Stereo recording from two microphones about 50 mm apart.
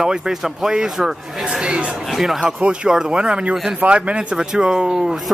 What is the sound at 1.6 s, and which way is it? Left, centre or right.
Speech, right.